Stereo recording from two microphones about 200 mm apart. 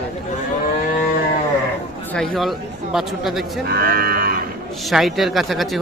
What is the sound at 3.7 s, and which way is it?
Cattle, 50° right (ahead or behind).